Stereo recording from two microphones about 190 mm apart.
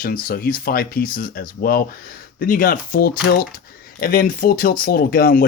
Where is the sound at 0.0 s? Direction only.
50° left (ahead or behind).